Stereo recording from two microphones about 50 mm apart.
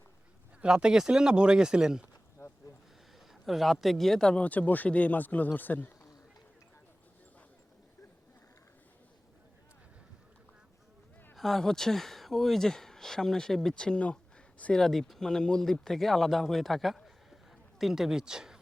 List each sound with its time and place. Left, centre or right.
0.6 s speech: centre
3.4 s speech: centre
4.4 s speech: left
11.3 s speech: centre